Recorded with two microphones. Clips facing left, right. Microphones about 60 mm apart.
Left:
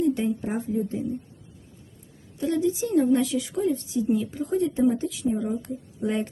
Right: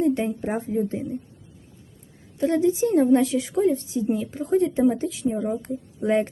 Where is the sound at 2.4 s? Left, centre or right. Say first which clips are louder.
Right 4 dB; right.